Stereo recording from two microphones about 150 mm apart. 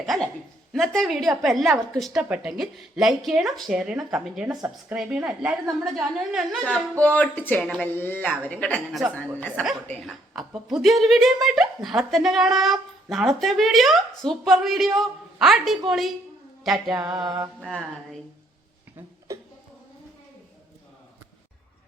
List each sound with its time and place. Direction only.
0.0 s a woman's voice: centre (ahead or behind)
9.1 s a woman's voice: 10° left (ahead or behind)
10.1 s speech: centre (ahead or behind)
16.9 s mantra: 25° right (ahead or behind)
17.6 s speech: 5° left (ahead or behind)
19.3 s a sound: 20° right (ahead or behind)